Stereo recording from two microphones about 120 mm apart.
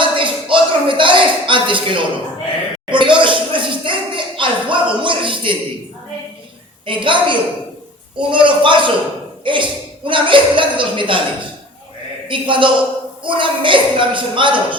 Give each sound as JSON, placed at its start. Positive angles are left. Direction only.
{"t": 0.0, "sound": "a sound", "side_deg": -45}
{"t": 6.8, "sound": "speech", "side_deg": -45}
{"t": 12.3, "sound": "speech", "side_deg": -45}